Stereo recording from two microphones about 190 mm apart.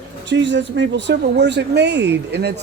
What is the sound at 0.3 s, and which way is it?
Speech, 70° right (ahead or behind).